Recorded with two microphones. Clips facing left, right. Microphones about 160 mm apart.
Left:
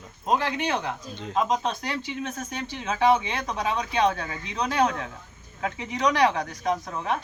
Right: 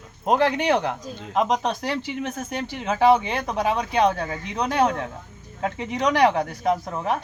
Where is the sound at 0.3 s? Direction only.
65° right (ahead or behind).